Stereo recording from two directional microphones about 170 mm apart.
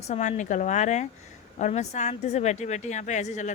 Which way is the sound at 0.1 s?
45° left (ahead or behind).